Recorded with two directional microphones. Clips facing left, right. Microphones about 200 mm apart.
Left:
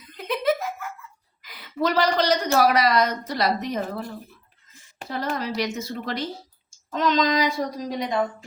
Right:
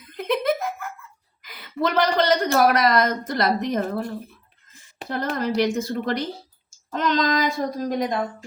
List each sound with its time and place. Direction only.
0.1 s laughter: 55° right (ahead or behind)
1.4 s a woman's voice: 50° right (ahead or behind)
5.0 s a woman's voice: 50° right (ahead or behind)